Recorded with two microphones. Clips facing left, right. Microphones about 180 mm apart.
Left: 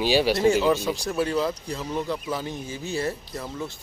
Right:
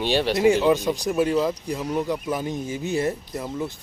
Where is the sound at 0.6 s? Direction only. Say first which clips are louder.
Right 3 dB; 15° right (ahead or behind).